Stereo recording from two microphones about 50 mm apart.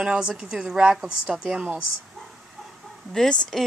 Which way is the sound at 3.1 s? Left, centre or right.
Centre.